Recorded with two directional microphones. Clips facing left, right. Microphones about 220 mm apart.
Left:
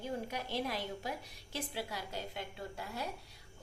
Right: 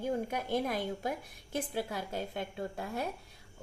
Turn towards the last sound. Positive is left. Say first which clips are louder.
# right 6 dB
turn(degrees=-50)  # may be behind; listen again after turning